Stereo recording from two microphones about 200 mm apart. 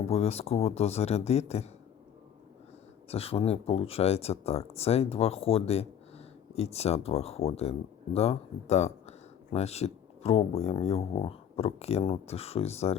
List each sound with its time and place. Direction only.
0.1 s speech: 30° left (ahead or behind)
3.1 s speech: 30° left (ahead or behind)